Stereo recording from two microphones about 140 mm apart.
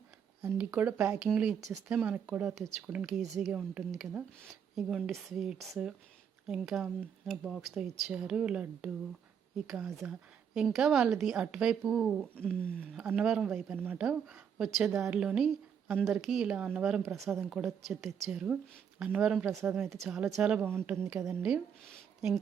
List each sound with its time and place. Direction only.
0.4 s speech: 15° right (ahead or behind)
2.6 s a woman's voice: centre (ahead or behind)
12.2 s a sound: 10° left (ahead or behind)
13.0 s a woman's voice: 5° right (ahead or behind)
20.9 s speech: 15° right (ahead or behind)
21.8 s a sound: centre (ahead or behind)